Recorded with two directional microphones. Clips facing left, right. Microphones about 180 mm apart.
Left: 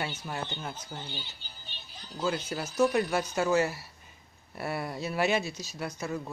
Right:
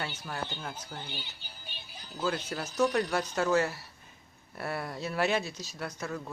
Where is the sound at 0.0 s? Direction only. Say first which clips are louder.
Left 2 dB; 20° left (ahead or behind).